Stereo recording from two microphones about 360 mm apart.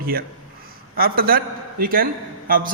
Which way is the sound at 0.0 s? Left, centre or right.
Right.